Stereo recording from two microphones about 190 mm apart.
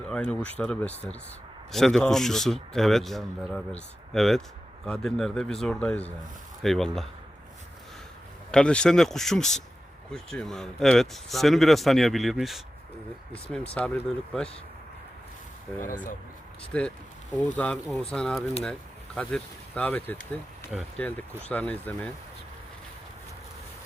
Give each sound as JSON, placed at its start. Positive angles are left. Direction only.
{"t": 0.1, "sound": "speech", "side_deg": 5}
{"t": 8.4, "sound": "speech", "side_deg": 5}
{"t": 13.7, "sound": "speech", "side_deg": 5}
{"t": 16.7, "sound": "speech", "side_deg": 5}
{"t": 20.7, "sound": "speech", "side_deg": 0}